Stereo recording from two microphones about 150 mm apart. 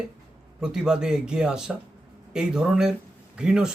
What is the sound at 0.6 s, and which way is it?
Speech, 5° right (ahead or behind).